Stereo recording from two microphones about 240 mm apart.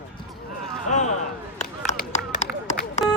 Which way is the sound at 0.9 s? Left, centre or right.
Left.